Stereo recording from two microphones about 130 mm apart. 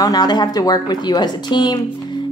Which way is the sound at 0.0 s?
30° left (ahead or behind).